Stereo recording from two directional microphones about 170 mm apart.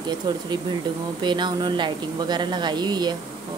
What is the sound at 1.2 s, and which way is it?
A woman's voice, 25° right (ahead or behind).